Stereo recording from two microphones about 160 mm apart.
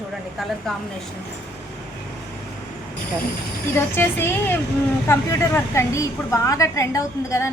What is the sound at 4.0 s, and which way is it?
A woman's voice, 15° left (ahead or behind).